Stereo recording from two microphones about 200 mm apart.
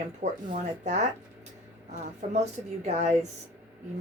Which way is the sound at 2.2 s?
35° right (ahead or behind).